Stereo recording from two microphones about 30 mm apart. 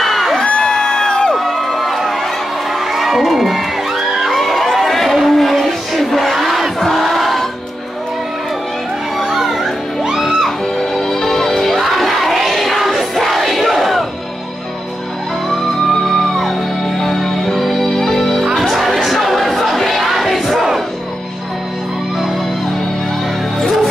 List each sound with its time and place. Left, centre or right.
0.0 s crowd: centre
0.5 s crowd: left
0.7 s music: left
1.3 s crowd: centre
4.7 s a sound: centre
5.7 s battle cry: centre
7.0 s music: centre
9.2 s music: centre
11.0 s music: centre
11.8 s crowd: centre
15.9 s music: centre
18.6 s music: centre
18.9 s crowd: centre